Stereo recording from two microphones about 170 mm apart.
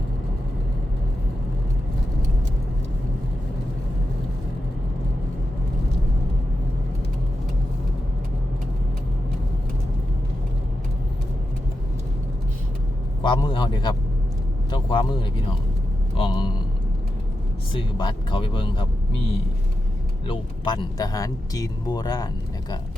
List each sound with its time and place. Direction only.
13.2 s speech: 25° left (ahead or behind)
17.7 s speech: 25° left (ahead or behind)
20.2 s speech: 30° left (ahead or behind)